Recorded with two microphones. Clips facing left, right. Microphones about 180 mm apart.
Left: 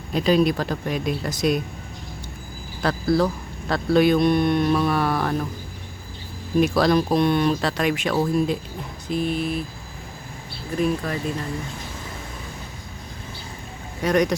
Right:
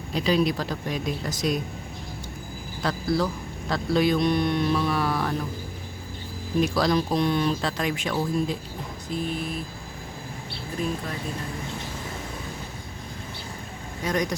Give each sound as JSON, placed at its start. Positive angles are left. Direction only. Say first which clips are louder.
{"t": 0.1, "sound": "speech", "louder": "left 4 dB", "side_deg": 50}
{"t": 2.8, "sound": "speech", "louder": "left 5 dB", "side_deg": 55}
{"t": 6.6, "sound": "speech", "louder": "left 4 dB", "side_deg": 60}
{"t": 9.1, "sound": "vehicle", "louder": "left 6 dB", "side_deg": 75}
{"t": 14.0, "sound": "vehicle", "louder": "left 6 dB", "side_deg": 65}